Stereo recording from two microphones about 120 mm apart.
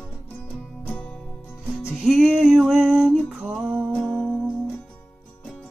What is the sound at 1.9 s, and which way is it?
Music, 5° right (ahead or behind).